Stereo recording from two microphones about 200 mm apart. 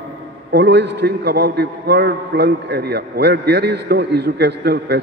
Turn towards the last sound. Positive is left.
turn(degrees=-55)  # may be behind; listen again after turning